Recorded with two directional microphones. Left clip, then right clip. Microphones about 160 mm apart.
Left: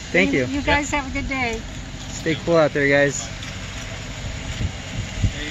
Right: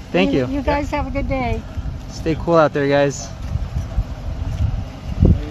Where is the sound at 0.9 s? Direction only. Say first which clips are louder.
Right 2 dB; 60° right (ahead or behind).